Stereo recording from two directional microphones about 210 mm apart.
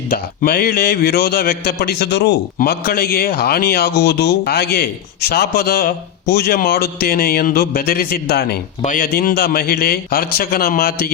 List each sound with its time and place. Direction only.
0.1 s a man's voice: 45° left (ahead or behind)